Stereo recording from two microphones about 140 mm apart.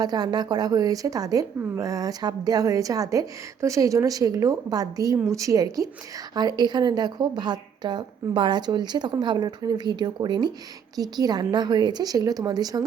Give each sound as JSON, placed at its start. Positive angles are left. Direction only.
{"t": 0.0, "sound": "a woman's voice", "side_deg": -30}